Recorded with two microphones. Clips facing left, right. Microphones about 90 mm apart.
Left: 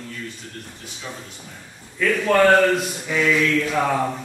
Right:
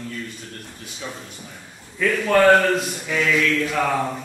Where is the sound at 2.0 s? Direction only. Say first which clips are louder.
Even; centre (ahead or behind).